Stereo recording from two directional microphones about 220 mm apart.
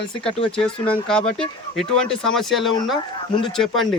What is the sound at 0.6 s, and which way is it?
A man's voice, 5° left (ahead or behind).